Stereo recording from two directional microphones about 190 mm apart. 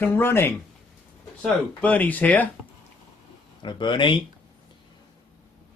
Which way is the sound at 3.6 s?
25° left (ahead or behind).